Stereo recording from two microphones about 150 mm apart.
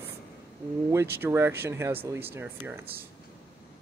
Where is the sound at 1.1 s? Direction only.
15° right (ahead or behind).